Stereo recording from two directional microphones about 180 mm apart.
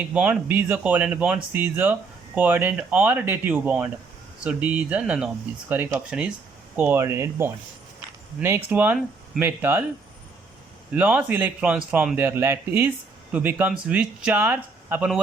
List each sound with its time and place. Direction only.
0.0 s speech: 10° right (ahead or behind)
10.9 s speech: 10° right (ahead or behind)